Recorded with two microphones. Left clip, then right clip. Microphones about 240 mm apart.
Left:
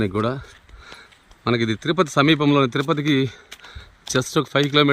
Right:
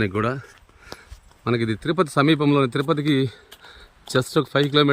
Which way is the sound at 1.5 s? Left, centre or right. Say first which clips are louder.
Left 1 dB; centre.